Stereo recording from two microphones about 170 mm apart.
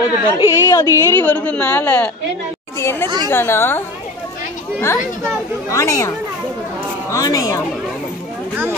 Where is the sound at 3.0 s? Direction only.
25° right (ahead or behind).